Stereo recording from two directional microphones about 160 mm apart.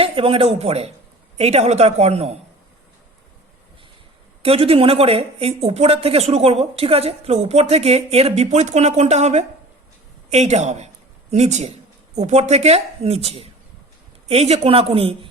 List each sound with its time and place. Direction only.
0.0 s speech: 35° right (ahead or behind)
4.4 s speech: 35° right (ahead or behind)